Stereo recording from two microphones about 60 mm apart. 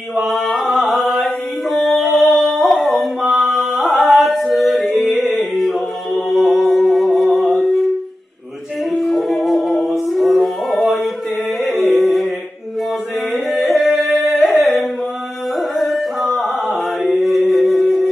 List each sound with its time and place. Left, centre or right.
0.2 s a sound: centre
0.8 s music: centre
2.0 s a sound: left
2.7 s howl: centre
3.3 s singing: centre
9.3 s music: centre
13.5 s yodeling: centre
14.6 s carnatic music: centre
15.7 s chant: centre